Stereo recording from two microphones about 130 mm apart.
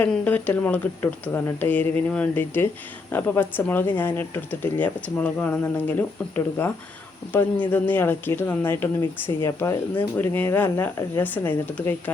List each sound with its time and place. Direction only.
0.0 s speech: 10° left (ahead or behind)